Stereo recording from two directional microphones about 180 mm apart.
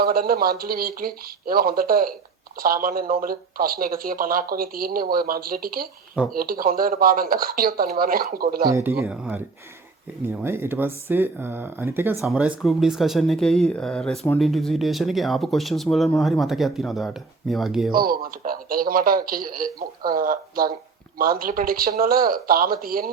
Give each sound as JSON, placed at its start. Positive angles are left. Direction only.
{"t": 0.0, "sound": "speech", "side_deg": -55}
{"t": 8.6, "sound": "speech", "side_deg": -15}
{"t": 17.9, "sound": "speech", "side_deg": -55}